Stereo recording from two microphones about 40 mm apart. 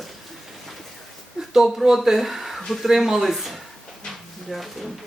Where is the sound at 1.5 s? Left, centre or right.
Centre.